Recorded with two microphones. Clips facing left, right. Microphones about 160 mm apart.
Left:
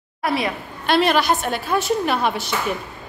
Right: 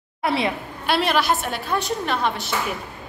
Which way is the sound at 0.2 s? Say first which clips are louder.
Even; 25° right (ahead or behind).